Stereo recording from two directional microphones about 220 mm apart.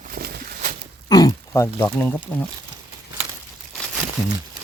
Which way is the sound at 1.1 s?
15° left (ahead or behind).